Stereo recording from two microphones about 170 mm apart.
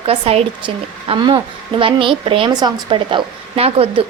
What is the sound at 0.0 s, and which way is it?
A woman's voice, 35° right (ahead or behind).